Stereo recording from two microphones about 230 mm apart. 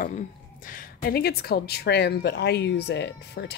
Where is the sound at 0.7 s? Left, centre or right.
Left.